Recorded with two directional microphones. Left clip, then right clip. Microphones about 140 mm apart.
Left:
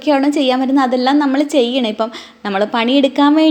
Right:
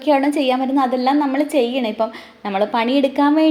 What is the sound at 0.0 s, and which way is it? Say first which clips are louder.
A woman's voice: left 2 dB; 25° left (ahead or behind).